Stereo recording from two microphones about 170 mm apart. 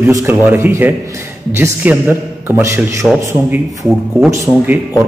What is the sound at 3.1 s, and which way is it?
A man's voice, centre (ahead or behind).